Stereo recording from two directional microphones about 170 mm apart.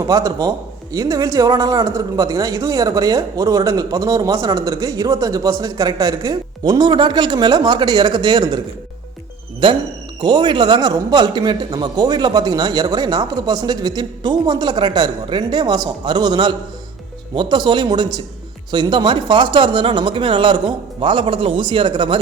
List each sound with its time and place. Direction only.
0.1 s speech: 20° right (ahead or behind)
10.2 s speech: 25° right (ahead or behind)